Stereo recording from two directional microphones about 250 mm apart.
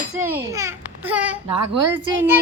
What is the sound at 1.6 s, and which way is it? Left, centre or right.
Speech, right.